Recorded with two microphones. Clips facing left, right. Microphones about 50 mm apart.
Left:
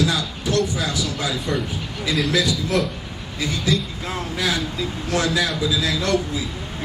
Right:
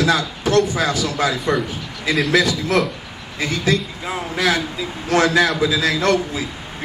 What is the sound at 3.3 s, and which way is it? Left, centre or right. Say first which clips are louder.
A man's voice: right 3 dB; right.